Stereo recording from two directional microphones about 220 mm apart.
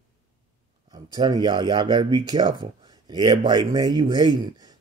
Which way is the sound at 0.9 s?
20° right (ahead or behind).